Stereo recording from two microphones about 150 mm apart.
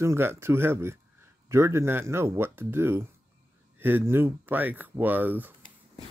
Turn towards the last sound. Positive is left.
turn(degrees=-10)  # may be behind; listen again after turning